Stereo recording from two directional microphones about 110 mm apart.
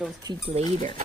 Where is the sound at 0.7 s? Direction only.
90° right.